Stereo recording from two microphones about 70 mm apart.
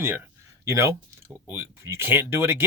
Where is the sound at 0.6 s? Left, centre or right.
Right.